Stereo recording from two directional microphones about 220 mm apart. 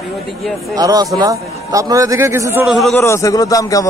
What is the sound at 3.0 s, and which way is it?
Speech, 15° left (ahead or behind).